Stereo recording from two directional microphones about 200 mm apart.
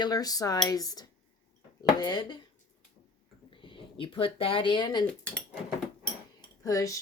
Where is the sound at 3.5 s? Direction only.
25° left (ahead or behind).